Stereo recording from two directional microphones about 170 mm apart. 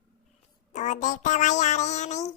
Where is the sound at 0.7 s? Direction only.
45° left (ahead or behind).